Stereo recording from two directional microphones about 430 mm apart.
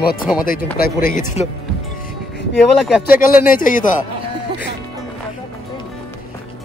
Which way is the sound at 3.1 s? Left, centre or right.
Centre.